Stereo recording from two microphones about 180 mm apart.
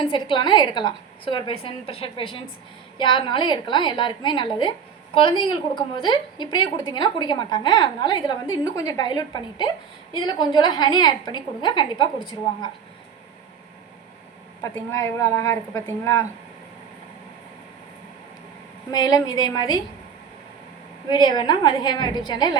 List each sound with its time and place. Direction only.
0.0 s a woman's voice: 25° left (ahead or behind)
14.6 s a woman's voice: 15° left (ahead or behind)
18.9 s a woman's voice: 20° left (ahead or behind)
21.1 s a woman's voice: 25° left (ahead or behind)